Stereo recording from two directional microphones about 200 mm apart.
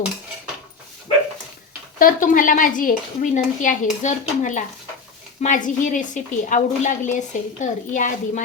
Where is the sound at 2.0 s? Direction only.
45° left (ahead or behind).